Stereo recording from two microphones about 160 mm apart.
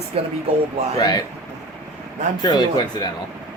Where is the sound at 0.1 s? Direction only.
35° right (ahead or behind).